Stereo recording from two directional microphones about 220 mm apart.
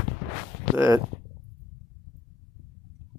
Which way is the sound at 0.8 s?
15° right (ahead or behind).